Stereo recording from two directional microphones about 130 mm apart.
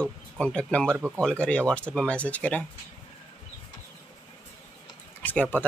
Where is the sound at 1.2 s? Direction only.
5° left (ahead or behind).